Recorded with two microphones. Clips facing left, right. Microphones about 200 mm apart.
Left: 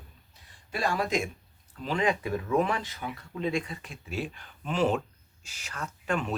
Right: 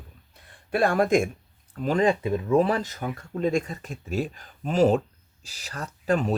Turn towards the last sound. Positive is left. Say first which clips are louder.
# right 6 dB
turn(degrees=-35)  # may be behind; listen again after turning